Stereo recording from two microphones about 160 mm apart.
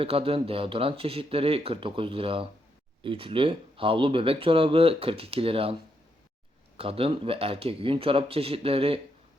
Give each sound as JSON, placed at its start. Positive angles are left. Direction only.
{"t": 0.0, "sound": "speech", "side_deg": -35}
{"t": 6.7, "sound": "speech", "side_deg": -35}